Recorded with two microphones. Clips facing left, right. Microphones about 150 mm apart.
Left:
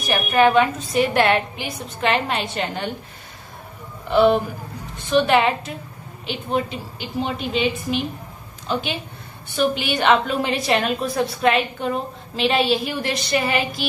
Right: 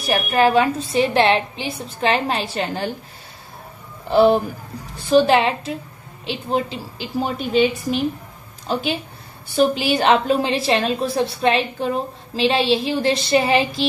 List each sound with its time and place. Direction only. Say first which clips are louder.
0.0 s a woman's voice: even; 35° right (ahead or behind)
4.1 s a woman's voice: right 2 dB; 35° right (ahead or behind)
9.6 s a woman's voice: right 4 dB; 35° right (ahead or behind)